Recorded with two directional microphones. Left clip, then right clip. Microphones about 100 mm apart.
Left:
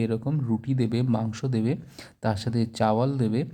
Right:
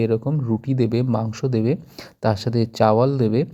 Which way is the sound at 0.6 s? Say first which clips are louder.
Right 9 dB; 25° right (ahead or behind).